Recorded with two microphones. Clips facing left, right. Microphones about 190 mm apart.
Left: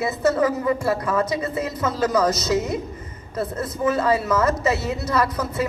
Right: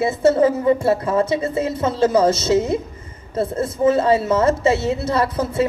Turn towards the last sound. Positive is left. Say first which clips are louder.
# right 3 dB
turn(degrees=-30)  # may be behind; listen again after turning